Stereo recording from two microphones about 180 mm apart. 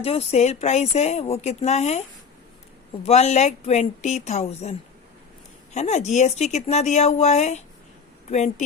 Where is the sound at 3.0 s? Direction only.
40° left (ahead or behind).